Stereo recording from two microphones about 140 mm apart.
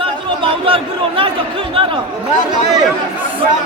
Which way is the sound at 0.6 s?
40° right (ahead or behind).